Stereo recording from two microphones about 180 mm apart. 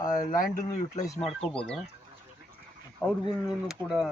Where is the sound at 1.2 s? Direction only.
5° left (ahead or behind).